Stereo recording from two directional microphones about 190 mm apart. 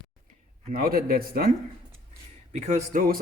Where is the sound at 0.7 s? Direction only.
50° right (ahead or behind).